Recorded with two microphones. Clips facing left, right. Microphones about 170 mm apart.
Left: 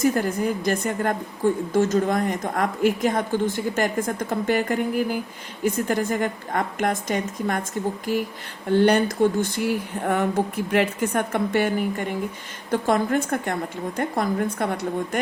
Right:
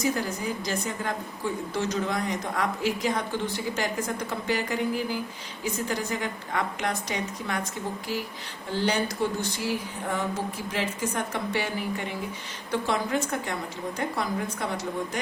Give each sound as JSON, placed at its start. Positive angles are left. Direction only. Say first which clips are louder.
{"t": 0.0, "sound": "a woman's voice", "louder": "left 6 dB", "side_deg": 50}
{"t": 8.7, "sound": "a woman's voice", "louder": "left 9 dB", "side_deg": 60}